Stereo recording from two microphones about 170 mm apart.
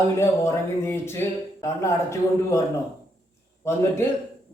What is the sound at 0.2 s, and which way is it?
Speech, 15° left (ahead or behind).